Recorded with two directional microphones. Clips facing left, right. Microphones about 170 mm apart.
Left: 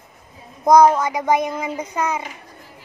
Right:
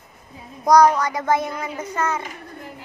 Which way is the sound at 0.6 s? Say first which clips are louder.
Left 2 dB; 20° left (ahead or behind).